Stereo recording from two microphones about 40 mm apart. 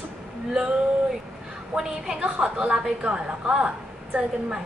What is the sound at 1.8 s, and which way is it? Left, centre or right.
Speech, centre.